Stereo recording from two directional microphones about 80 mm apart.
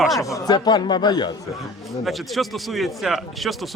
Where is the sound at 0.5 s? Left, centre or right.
Left.